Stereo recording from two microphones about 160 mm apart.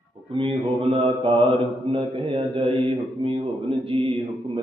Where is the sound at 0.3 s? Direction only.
35° right (ahead or behind).